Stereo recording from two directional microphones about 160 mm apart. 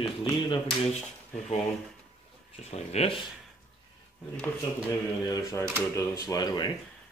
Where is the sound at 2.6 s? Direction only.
40° left (ahead or behind).